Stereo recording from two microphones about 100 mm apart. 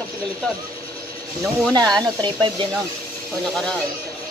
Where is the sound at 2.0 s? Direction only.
50° right (ahead or behind).